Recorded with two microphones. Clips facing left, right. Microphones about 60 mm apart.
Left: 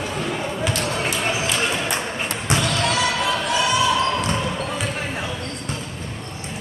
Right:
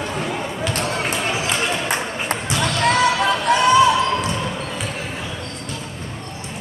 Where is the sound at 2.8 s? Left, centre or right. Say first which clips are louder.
Right 4 dB; right.